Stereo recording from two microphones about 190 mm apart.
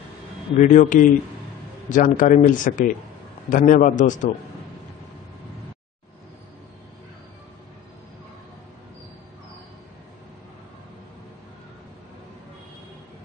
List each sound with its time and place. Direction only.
0.6 s speech: 40° left (ahead or behind)